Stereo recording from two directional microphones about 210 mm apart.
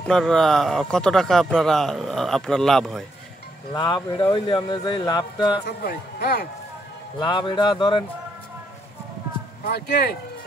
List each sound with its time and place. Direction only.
0.0 s speech: centre (ahead or behind)
3.7 s speech: 20° left (ahead or behind)
5.7 s speech: 50° left (ahead or behind)
7.2 s speech: 20° left (ahead or behind)
9.7 s speech: 50° left (ahead or behind)